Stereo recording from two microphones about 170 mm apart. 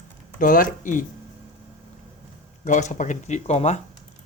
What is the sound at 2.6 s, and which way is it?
Speech, 45° left (ahead or behind).